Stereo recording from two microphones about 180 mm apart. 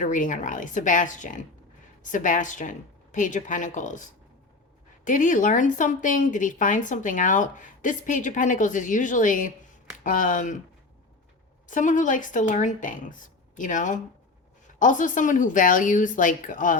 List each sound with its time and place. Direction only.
0.0 s speech: 45° left (ahead or behind)
11.7 s speech: 45° left (ahead or behind)